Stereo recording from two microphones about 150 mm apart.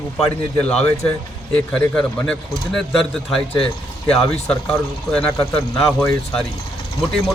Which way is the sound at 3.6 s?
40° left (ahead or behind).